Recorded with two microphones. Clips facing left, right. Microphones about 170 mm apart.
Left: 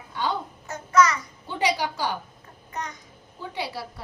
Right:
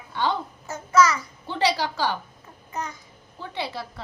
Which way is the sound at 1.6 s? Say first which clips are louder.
Right 1 dB; 15° left (ahead or behind).